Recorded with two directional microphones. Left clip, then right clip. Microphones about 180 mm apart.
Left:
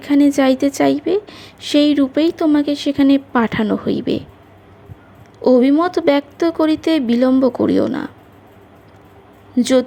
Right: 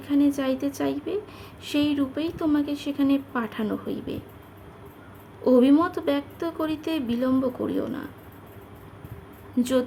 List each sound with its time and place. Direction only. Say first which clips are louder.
0.0 s a woman's voice: left 10 dB; 35° left (ahead or behind)
5.4 s a woman's voice: left 6 dB; 30° left (ahead or behind)
9.6 s a woman's voice: left 9 dB; 30° left (ahead or behind)